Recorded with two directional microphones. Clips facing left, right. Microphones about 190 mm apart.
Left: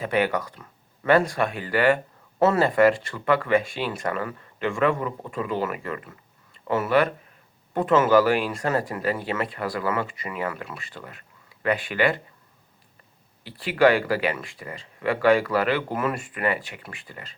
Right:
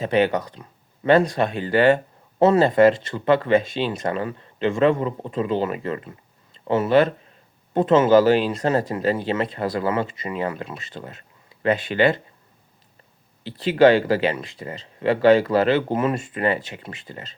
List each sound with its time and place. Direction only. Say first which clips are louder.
0.0 s speech: right 4 dB; 25° right (ahead or behind)
13.4 s speech: right 4 dB; 25° right (ahead or behind)